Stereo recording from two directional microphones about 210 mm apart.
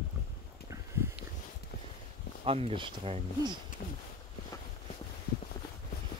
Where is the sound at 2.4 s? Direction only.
25° right (ahead or behind).